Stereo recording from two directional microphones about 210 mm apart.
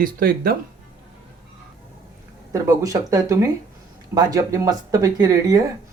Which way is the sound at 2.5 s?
15° right (ahead or behind).